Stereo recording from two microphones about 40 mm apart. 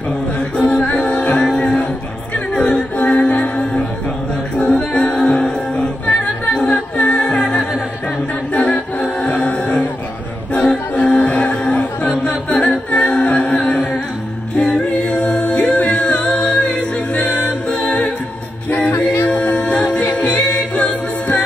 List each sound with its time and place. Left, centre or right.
0.4 s music: left
4.9 s a capella: left
7.2 s music: left
10.5 s music: left
11.0 s music: left
12.4 s a capella: left
14.5 s music: left
15.9 s a capella: left
19.3 s music: left